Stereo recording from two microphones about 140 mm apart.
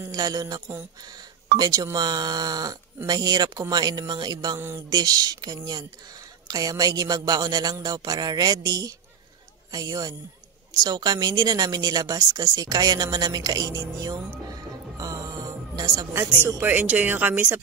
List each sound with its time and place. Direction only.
0.0 s speech: 25° right (ahead or behind)
4.6 s a sound: 15° right (ahead or behind)
4.8 s a woman's voice: 30° right (ahead or behind)